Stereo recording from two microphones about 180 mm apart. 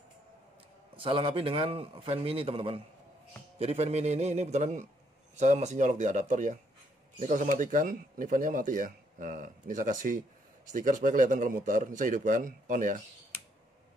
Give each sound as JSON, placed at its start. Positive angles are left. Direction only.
{"t": 0.9, "sound": "a man's voice", "side_deg": -30}